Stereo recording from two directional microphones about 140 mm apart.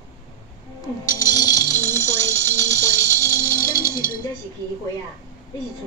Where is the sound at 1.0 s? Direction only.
25° left (ahead or behind).